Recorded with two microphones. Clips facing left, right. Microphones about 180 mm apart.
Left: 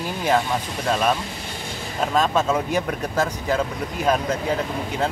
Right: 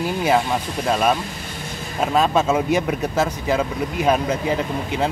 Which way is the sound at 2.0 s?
10° right (ahead or behind).